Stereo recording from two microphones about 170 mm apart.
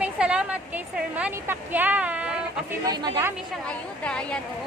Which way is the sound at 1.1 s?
10° right (ahead or behind).